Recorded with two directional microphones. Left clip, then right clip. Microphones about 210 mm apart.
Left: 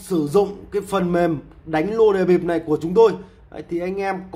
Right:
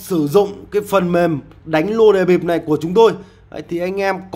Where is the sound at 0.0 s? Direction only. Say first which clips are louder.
Right 4 dB; 25° right (ahead or behind).